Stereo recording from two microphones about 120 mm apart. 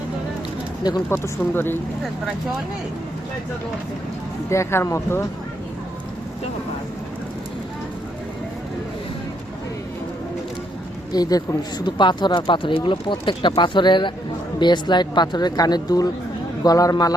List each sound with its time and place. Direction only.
1.1 s speech: 20° left (ahead or behind)
4.4 s speech: 25° left (ahead or behind)
11.1 s speech: 30° left (ahead or behind)